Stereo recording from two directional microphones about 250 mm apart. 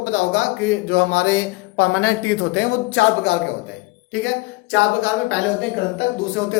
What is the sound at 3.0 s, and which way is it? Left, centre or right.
Speech, left.